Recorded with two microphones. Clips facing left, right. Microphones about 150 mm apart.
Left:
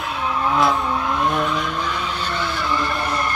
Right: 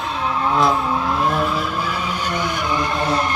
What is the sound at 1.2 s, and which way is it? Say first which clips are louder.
Vehicle: right 1 dB; centre (ahead or behind).